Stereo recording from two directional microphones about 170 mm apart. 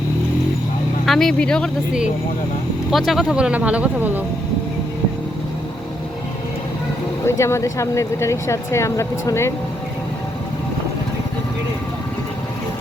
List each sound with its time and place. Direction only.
1.0 s speech: centre (ahead or behind)
3.1 s speech: centre (ahead or behind)
7.3 s speech: 15° left (ahead or behind)